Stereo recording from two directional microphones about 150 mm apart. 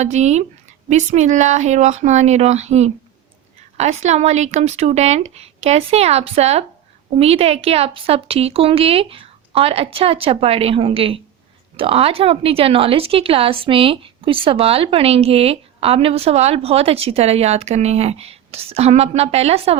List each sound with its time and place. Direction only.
0.0 s speech: 50° right (ahead or behind)